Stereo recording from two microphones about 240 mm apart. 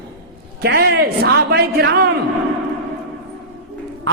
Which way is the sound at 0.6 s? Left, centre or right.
Right.